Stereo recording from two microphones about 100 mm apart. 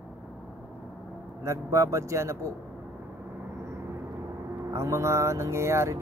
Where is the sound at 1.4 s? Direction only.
30° right (ahead or behind).